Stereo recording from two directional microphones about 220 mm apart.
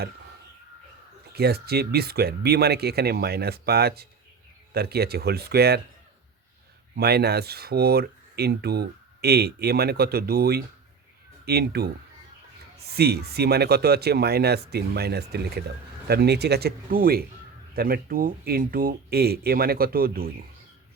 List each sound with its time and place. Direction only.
1.3 s speech: 45° right (ahead or behind)
6.9 s speech: 45° right (ahead or behind)
13.0 s speech: 45° right (ahead or behind)